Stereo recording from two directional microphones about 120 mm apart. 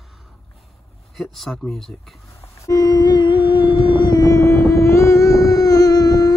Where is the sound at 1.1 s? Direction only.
Centre (ahead or behind).